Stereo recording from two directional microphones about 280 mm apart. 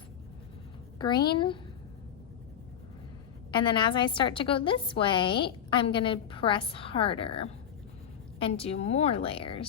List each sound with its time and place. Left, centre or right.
0.9 s a woman's voice: centre
3.5 s a woman's voice: centre